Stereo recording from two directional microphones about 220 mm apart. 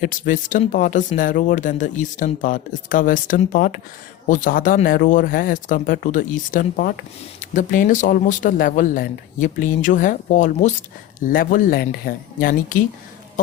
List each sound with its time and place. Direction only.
0.0 s speech: 35° left (ahead or behind)